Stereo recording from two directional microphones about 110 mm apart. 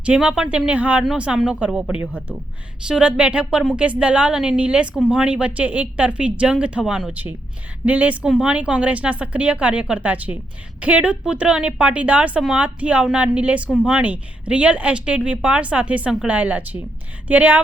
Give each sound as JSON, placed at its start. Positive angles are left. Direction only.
{"t": 0.0, "sound": "a woman's voice", "side_deg": -10}